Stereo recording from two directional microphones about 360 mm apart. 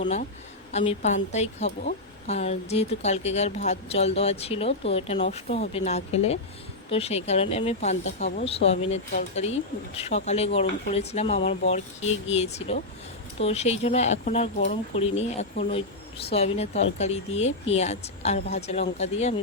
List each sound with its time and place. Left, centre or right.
0.0 s a woman's voice: left